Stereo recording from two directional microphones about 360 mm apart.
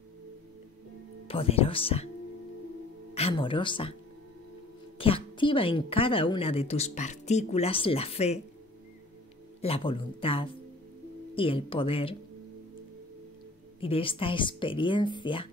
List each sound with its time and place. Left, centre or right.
1.2 s speech: centre
3.2 s speech: centre
4.9 s speech: centre
9.6 s speech: centre
13.7 s speech: centre